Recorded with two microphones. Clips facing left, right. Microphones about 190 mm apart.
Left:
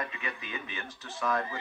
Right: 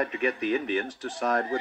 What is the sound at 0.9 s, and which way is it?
Speech, 75° right (ahead or behind).